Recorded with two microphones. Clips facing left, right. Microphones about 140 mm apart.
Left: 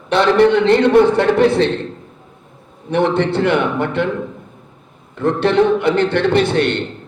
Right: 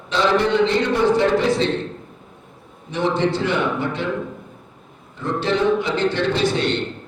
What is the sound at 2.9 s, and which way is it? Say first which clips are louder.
A man's voice: left 4 dB; 60° left (ahead or behind).